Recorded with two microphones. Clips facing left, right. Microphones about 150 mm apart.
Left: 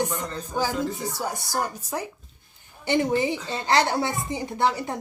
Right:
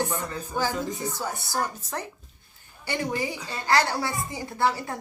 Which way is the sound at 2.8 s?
20° left (ahead or behind).